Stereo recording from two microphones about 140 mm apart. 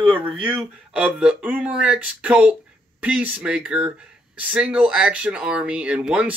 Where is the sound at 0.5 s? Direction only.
5° right (ahead or behind).